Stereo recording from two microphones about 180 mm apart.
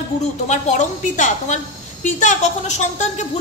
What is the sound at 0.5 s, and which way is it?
A woman's voice, 40° left (ahead or behind).